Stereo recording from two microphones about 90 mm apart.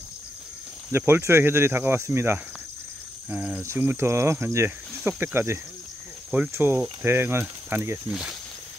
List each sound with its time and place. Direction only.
0.9 s speech: 25° right (ahead or behind)
3.3 s speech: 15° right (ahead or behind)
3.6 s speech: 25° right (ahead or behind)
8.1 s speech: 5° right (ahead or behind)